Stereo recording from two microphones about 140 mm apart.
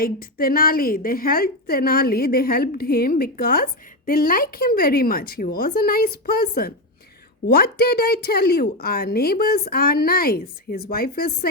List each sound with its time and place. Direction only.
0.0 s a woman's voice: 90° left